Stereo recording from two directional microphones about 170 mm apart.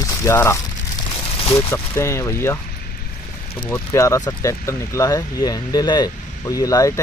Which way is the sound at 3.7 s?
15° left (ahead or behind).